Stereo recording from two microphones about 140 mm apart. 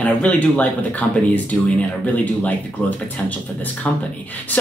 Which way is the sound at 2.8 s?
10° left (ahead or behind).